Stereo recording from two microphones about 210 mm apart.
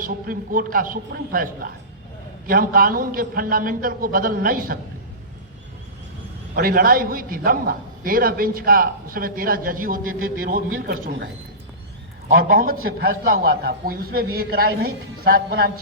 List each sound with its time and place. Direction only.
0.0 s a man's voice: 40° right (ahead or behind)
6.6 s a man's voice: 45° right (ahead or behind)
12.3 s a man's voice: 45° right (ahead or behind)